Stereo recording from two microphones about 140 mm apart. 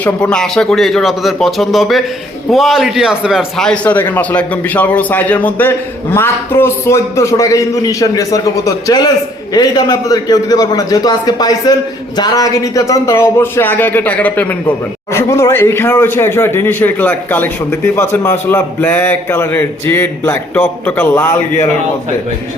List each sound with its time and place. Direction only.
0.0 s a man's voice: 5° left (ahead or behind)